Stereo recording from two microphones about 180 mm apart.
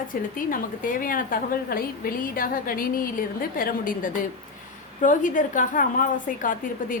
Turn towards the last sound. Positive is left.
turn(degrees=50)  # may be behind; listen again after turning